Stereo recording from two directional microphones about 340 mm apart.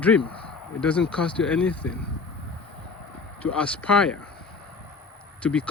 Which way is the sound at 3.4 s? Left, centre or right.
Centre.